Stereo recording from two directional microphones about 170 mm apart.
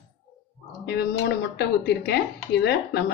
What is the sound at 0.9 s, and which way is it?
Speech, 70° left (ahead or behind).